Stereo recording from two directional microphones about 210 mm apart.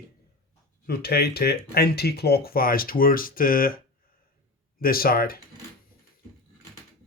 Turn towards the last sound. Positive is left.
turn(degrees=45)  # may be behind; listen again after turning